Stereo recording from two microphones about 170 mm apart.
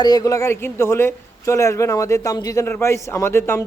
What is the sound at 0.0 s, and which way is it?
A man's voice, 25° left (ahead or behind).